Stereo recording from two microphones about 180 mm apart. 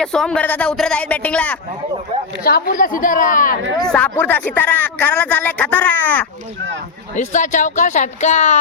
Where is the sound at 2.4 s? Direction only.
55° left (ahead or behind).